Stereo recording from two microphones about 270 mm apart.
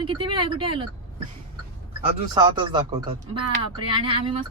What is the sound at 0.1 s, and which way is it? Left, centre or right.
Speech, centre.